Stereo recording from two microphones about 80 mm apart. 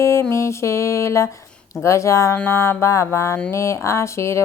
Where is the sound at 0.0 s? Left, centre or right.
Left.